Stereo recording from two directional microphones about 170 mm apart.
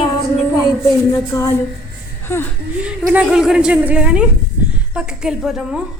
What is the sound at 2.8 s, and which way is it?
A woman's voice, 5° right (ahead or behind).